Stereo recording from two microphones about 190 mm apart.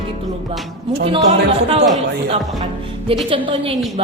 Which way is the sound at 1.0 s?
30° right (ahead or behind).